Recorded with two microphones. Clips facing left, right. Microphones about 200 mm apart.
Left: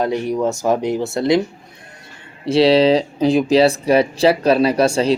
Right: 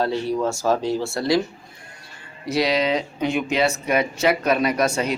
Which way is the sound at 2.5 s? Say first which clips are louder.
Left 8 dB; 30° left (ahead or behind).